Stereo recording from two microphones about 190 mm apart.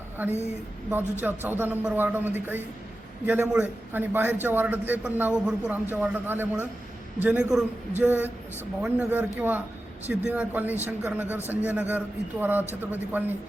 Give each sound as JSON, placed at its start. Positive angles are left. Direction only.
{"t": 0.9, "sound": "a man's voice", "side_deg": -10}